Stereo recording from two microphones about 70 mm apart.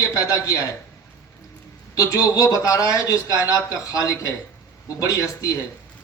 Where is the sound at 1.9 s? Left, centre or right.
Left.